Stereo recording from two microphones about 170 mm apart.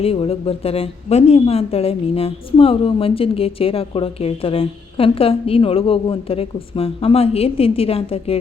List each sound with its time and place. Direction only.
0.0 s a woman's voice: 35° left (ahead or behind)